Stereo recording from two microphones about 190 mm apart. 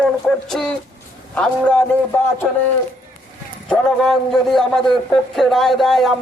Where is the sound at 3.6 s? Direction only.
Centre (ahead or behind).